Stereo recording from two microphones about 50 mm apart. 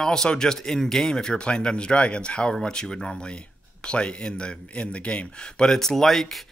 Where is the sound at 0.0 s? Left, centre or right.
Centre.